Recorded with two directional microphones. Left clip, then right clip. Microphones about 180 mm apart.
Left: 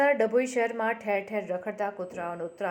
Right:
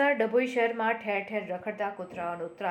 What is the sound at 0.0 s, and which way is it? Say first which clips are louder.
A woman's voice: left 2 dB; 35° left (ahead or behind).